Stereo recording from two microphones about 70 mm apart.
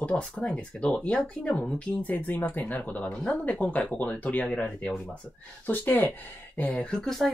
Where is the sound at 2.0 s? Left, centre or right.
Left.